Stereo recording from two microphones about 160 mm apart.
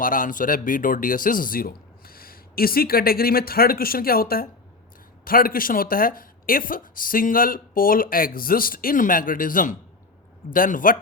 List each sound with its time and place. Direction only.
0.0 s speech: 60° left (ahead or behind)